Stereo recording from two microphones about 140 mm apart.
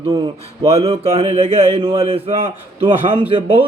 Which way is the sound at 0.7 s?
45° right (ahead or behind).